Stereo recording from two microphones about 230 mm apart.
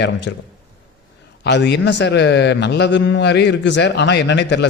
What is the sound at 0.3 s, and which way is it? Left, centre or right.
Speech, left.